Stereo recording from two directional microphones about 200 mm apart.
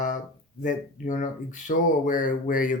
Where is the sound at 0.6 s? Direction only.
40° left (ahead or behind).